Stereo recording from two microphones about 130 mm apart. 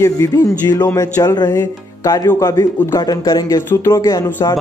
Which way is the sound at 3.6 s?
20° left (ahead or behind).